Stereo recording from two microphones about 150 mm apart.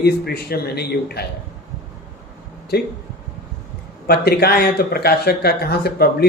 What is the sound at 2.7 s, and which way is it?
Speech, 90° left.